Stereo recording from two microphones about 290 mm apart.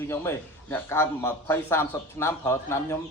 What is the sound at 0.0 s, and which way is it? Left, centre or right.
A man's voice, centre.